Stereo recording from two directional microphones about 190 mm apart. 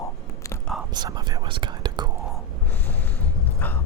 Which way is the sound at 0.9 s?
20° right (ahead or behind).